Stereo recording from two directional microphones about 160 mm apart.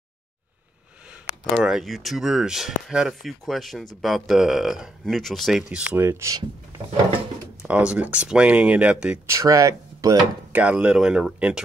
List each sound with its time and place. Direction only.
1.6 s speech: centre (ahead or behind); by 6.4 s 20° right (ahead or behind)
7.6 s speech: 5° right (ahead or behind)
9.4 s speech: 20° right (ahead or behind)
10.5 s speech: 10° right (ahead or behind)